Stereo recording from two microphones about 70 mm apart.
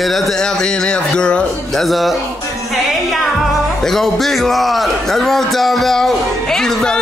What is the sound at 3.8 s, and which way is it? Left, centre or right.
A man's voice, centre.